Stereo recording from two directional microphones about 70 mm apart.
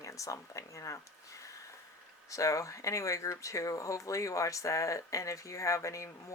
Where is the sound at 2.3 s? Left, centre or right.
Left.